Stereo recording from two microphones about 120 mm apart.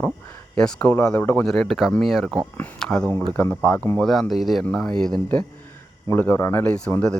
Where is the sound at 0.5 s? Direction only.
5° left (ahead or behind).